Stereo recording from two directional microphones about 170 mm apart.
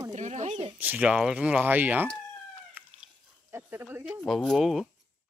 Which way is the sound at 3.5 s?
10° right (ahead or behind).